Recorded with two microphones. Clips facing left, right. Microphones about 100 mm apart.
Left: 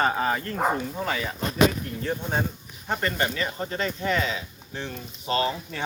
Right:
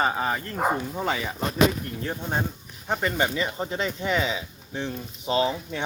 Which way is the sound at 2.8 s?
10° right (ahead or behind).